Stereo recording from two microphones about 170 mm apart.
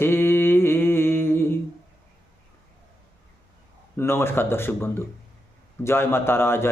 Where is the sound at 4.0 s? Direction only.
15° left (ahead or behind).